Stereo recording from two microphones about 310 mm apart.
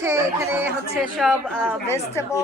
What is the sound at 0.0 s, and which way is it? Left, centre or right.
Speech, centre.